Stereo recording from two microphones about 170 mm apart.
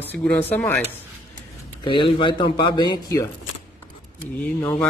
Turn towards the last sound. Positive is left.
turn(degrees=10)  # may be behind; listen again after turning